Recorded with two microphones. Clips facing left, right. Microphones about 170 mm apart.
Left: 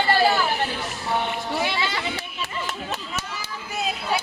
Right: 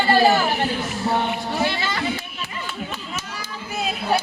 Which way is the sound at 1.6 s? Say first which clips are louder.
Right 2 dB; 50° right (ahead or behind).